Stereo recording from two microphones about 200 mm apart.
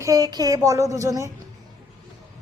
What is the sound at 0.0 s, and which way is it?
A child's voice, 20° right (ahead or behind).